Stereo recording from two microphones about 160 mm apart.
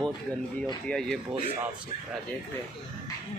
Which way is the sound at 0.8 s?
5° left (ahead or behind).